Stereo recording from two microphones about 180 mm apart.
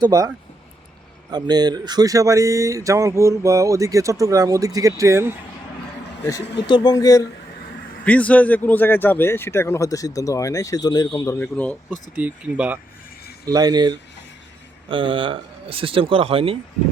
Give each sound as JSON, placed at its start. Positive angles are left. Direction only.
{"t": 0.0, "sound": "speech", "side_deg": -20}
{"t": 1.3, "sound": "speech", "side_deg": -25}
{"t": 6.2, "sound": "speech", "side_deg": 20}
{"t": 8.0, "sound": "speech", "side_deg": 10}
{"t": 12.1, "sound": "speech", "side_deg": -10}
{"t": 13.5, "sound": "speech", "side_deg": -20}